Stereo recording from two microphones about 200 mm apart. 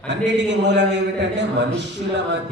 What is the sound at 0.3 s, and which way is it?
Mantra, 60° right (ahead or behind).